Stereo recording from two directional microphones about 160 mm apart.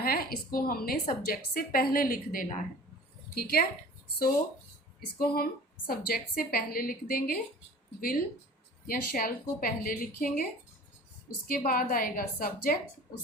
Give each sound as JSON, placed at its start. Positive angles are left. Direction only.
{"t": 0.0, "sound": "a woman's voice", "side_deg": 70}
{"t": 3.3, "sound": "a woman's voice", "side_deg": 70}
{"t": 4.9, "sound": "a woman's voice", "side_deg": 70}
{"t": 8.9, "sound": "a woman's voice", "side_deg": 65}
{"t": 11.4, "sound": "a woman's voice", "side_deg": 60}